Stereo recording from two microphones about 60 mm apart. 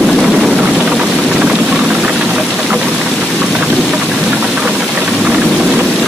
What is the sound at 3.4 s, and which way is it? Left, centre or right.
Engine knocking, centre.